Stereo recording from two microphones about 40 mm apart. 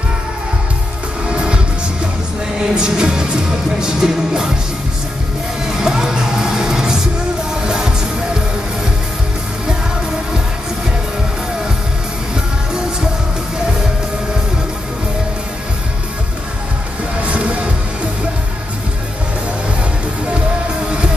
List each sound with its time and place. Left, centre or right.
1.3 s music: right
2.7 s music: right
5.7 s music: centre
17.2 s music: right